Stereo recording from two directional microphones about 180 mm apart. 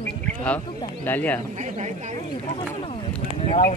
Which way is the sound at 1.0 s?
10° left (ahead or behind).